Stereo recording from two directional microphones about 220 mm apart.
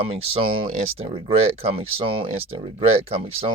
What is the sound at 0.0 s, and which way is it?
Speech, 25° right (ahead or behind).